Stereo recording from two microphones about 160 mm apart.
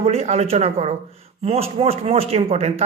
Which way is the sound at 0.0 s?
40° right (ahead or behind).